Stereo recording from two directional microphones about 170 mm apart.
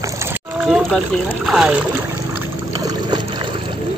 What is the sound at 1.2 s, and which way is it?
Speech, 5° right (ahead or behind).